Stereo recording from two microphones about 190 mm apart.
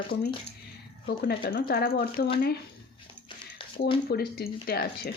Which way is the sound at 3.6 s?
25° left (ahead or behind).